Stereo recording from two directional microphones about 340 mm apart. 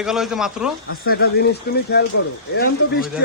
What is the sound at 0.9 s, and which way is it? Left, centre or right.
Speech, left.